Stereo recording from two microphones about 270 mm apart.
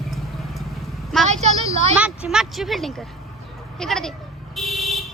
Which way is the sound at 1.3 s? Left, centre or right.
Right.